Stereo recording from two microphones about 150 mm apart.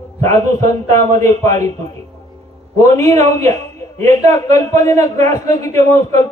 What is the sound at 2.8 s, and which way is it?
A man's voice, 20° left (ahead or behind).